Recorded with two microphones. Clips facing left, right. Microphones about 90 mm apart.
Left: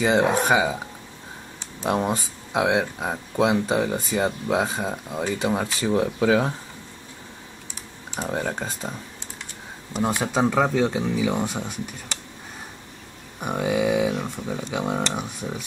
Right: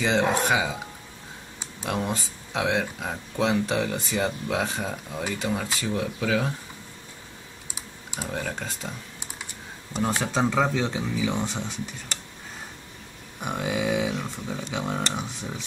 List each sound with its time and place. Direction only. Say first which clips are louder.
0.0 s speech: left 3 dB; 15° left (ahead or behind)
1.8 s speech: left 5 dB; 30° left (ahead or behind)
2.5 s speech: left 4 dB; 15° left (ahead or behind)
5.5 s speech: left 6 dB; 35° left (ahead or behind)
8.2 s speech: left 5 dB; 25° left (ahead or behind)
9.9 s speech: left 2 dB; 10° left (ahead or behind)
13.4 s a sound: left 4 dB; 5° left (ahead or behind)
13.7 s speech: left 4 dB; 15° left (ahead or behind)